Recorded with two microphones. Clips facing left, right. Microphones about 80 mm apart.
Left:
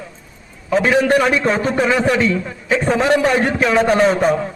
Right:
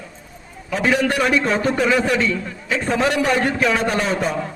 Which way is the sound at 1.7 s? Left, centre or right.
Centre.